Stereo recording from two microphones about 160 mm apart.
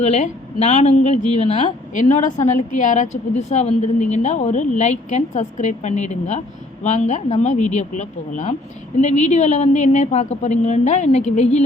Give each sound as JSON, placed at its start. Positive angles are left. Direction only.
{"t": 0.0, "sound": "speech", "side_deg": 45}